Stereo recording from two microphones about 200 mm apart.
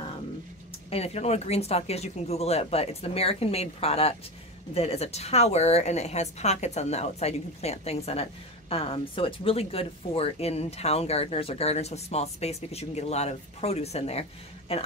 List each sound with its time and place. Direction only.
0.8 s a woman's voice: 30° left (ahead or behind)